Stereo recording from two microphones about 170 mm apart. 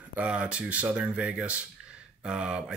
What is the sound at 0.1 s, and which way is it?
Speech, 10° right (ahead or behind).